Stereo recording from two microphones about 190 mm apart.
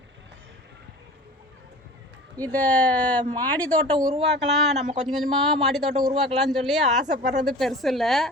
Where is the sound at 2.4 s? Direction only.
10° left (ahead or behind).